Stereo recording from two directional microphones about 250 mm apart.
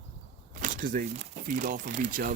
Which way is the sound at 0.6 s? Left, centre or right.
Right.